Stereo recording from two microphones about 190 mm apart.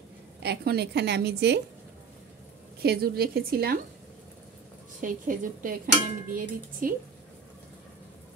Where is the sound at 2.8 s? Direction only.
55° right (ahead or behind).